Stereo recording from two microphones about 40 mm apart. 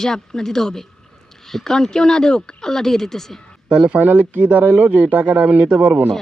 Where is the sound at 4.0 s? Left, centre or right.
Right.